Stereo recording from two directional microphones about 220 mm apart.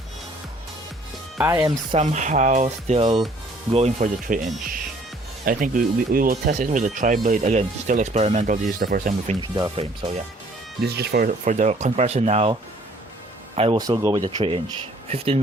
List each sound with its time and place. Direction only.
1.4 s speech: 10° right (ahead or behind)
1.6 s speech: 20° right (ahead or behind)
2.0 s speech: 30° right (ahead or behind)
9.4 s speech: 20° right (ahead or behind)
10.8 s speech: 45° right (ahead or behind)
11.4 s speech: 30° right (ahead or behind)
13.6 s speech: 20° right (ahead or behind)